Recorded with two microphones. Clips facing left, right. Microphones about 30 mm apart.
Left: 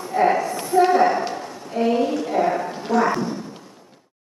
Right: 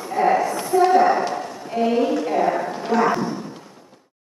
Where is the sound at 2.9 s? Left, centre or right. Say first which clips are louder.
Right 1 dB; centre.